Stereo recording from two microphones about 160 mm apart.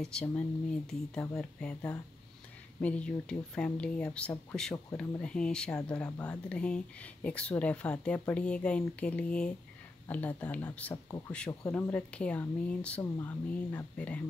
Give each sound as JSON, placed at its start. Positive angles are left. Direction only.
{"t": 0.0, "sound": "speech", "side_deg": 5}
{"t": 11.1, "sound": "speech", "side_deg": 20}
{"t": 11.6, "sound": "speech", "side_deg": 10}